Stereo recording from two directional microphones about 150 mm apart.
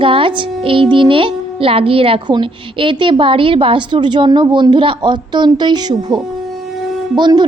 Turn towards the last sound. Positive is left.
turn(degrees=-30)  # may be behind; listen again after turning